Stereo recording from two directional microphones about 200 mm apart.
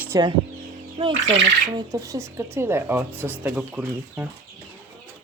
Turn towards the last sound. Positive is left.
turn(degrees=-5)  # may be behind; listen again after turning